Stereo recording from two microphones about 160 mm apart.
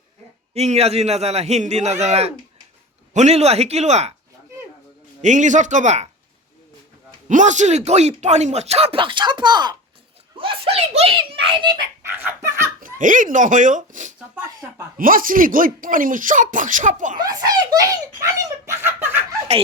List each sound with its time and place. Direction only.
0.5 s a man's voice: 45° right (ahead or behind)
5.2 s speech: 50° right (ahead or behind)
7.3 s a man's voice: 50° right (ahead or behind); by 11.8 s 30° right (ahead or behind)
12.1 s a sound: 15° right (ahead or behind)
12.8 s speech: 55° right (ahead or behind)
17.2 s a child's voice: 25° right (ahead or behind)